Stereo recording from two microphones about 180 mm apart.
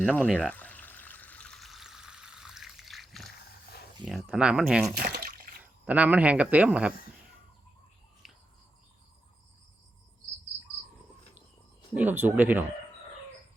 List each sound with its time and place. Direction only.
0.0 s speech: centre (ahead or behind)
0.3 s pour: 5° left (ahead or behind)
4.0 s speech: 5° right (ahead or behind)
5.0 s water: 55° right (ahead or behind)
5.5 s speech: 5° right (ahead or behind)
8.2 s bird: centre (ahead or behind)
11.9 s speech: 10° right (ahead or behind)